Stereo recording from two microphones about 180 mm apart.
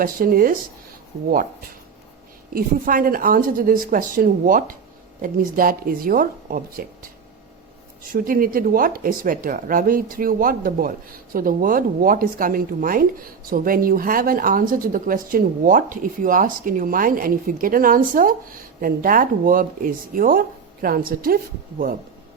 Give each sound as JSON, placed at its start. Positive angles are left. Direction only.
{"t": 0.0, "sound": "speech", "side_deg": -50}
{"t": 2.5, "sound": "speech", "side_deg": -50}
{"t": 8.1, "sound": "speech", "side_deg": -50}